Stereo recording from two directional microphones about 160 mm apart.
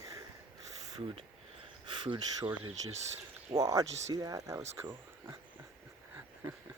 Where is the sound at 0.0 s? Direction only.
20° right (ahead or behind).